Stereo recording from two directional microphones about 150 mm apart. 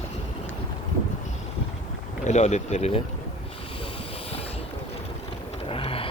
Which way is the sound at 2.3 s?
50° left (ahead or behind).